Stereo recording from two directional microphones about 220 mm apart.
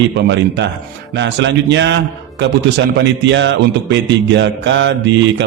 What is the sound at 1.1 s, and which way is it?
A man's voice, 55° right (ahead or behind).